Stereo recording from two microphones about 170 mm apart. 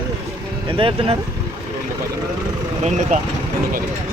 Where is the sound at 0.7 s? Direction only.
30° right (ahead or behind).